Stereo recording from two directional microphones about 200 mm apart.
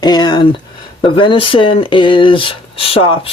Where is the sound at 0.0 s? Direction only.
20° left (ahead or behind).